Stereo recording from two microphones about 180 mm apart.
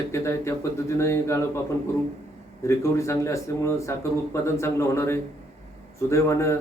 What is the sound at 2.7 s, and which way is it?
Speech, 15° left (ahead or behind).